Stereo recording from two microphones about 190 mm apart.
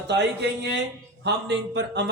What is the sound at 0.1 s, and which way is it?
A man's voice, 65° right (ahead or behind).